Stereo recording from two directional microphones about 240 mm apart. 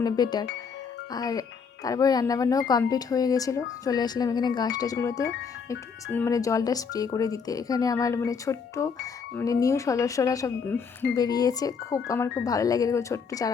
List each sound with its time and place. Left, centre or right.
0.0 s speech: centre